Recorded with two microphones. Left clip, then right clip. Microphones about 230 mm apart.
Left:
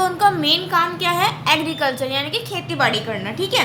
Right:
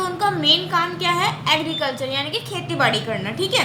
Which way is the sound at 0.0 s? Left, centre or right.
Left.